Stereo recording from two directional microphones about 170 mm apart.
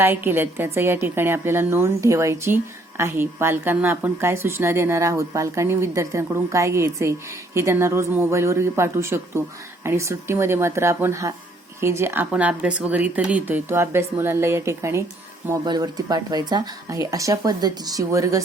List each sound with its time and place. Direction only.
0.0 s a woman's voice: 15° right (ahead or behind)